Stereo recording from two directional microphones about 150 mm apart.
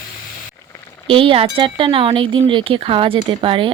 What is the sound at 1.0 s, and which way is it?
Speech, 35° right (ahead or behind).